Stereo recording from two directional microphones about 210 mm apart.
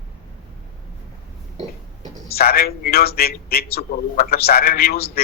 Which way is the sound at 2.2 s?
45° left (ahead or behind).